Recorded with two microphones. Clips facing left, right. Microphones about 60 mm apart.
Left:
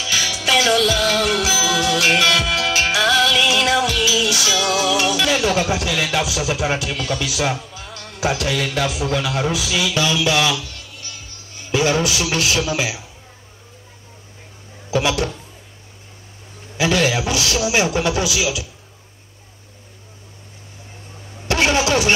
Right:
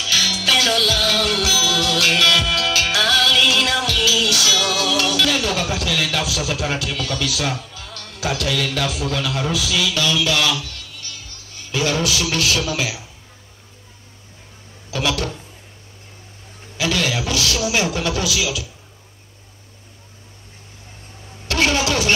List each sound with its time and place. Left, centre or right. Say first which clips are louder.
0.0 s music: even; centre
14.9 s speech: left 3 dB; left
16.7 s a man's voice: left 4 dB; left
21.5 s vehicle: left 2 dB; left